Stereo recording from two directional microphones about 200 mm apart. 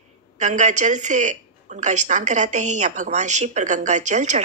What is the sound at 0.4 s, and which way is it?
A woman's voice, 35° right (ahead or behind).